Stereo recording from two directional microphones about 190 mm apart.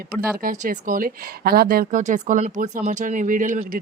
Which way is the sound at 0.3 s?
45° right (ahead or behind).